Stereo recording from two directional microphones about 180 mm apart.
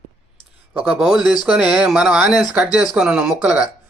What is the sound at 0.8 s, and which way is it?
Speech, centre (ahead or behind).